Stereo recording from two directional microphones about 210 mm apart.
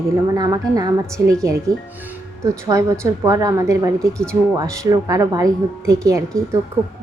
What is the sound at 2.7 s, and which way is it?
A woman's voice, 15° right (ahead or behind).